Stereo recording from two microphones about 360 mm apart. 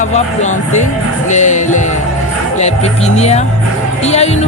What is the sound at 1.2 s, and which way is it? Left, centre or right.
Music, centre.